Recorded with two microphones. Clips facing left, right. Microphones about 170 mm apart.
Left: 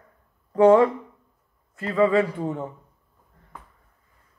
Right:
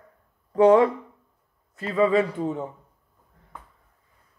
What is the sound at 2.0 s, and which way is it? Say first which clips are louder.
Speech: left 1 dB; 25° right (ahead or behind).